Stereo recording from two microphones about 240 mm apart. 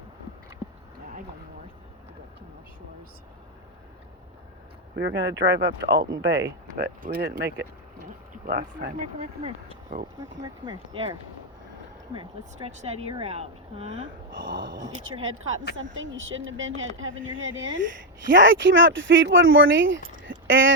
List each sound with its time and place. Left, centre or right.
4.9 s speech: right
10.4 s speech: centre
12.6 s speech: right
14.4 s speech: right
14.8 s speech: right
15.2 s speech: right
20.2 s a sound: right